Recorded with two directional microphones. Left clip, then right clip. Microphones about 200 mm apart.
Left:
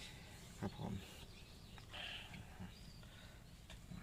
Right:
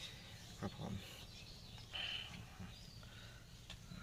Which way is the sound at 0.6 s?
Centre (ahead or behind).